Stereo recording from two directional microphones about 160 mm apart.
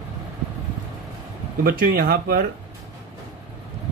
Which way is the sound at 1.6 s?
65° right (ahead or behind).